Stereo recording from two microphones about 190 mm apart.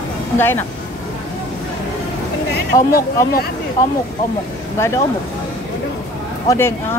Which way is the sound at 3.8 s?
15° left (ahead or behind).